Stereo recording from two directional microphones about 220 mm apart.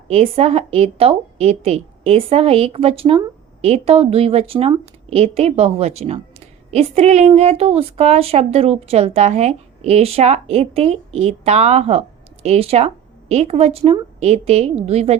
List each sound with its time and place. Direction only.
0.1 s a woman's voice: 30° right (ahead or behind)